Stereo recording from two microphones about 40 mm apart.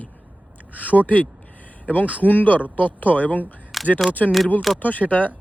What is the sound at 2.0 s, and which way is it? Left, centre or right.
Speech, right.